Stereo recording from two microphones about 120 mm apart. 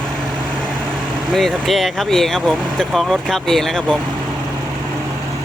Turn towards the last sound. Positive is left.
turn(degrees=5)  # may be behind; listen again after turning